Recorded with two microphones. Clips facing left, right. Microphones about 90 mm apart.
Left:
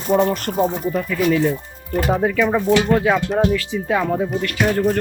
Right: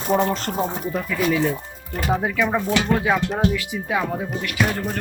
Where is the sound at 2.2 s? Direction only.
5° right (ahead or behind).